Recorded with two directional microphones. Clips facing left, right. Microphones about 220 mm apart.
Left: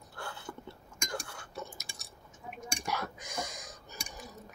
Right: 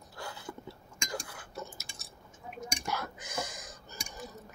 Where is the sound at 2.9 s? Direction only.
5° right (ahead or behind).